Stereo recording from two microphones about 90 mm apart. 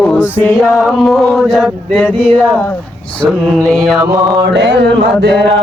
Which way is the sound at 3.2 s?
10° left (ahead or behind).